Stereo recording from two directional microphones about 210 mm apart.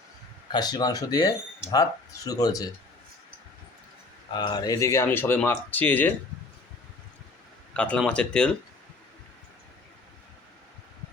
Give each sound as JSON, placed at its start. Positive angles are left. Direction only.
{"t": 0.5, "sound": "speech", "side_deg": 20}
{"t": 4.4, "sound": "speech", "side_deg": 20}
{"t": 7.7, "sound": "speech", "side_deg": 5}